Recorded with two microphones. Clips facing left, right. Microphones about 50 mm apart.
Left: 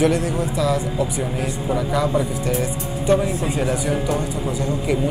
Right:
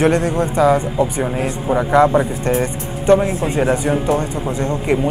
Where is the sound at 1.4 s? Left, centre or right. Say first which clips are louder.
Right 5 dB; right.